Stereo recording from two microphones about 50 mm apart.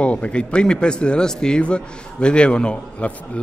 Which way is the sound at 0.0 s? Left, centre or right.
Left.